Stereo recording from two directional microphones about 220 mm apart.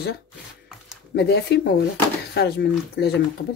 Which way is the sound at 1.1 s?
50° left (ahead or behind).